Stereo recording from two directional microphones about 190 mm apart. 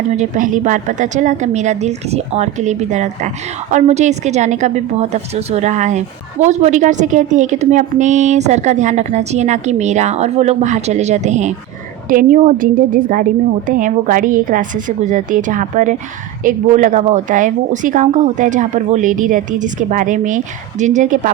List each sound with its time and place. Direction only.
0.2 s a woman's voice: 45° right (ahead or behind)